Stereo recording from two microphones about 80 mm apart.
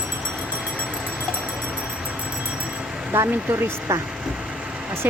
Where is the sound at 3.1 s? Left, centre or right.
Right.